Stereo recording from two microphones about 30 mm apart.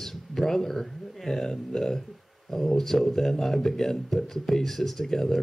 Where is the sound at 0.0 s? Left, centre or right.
Centre.